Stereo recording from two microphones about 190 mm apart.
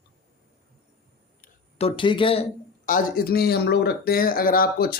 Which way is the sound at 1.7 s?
30° left (ahead or behind).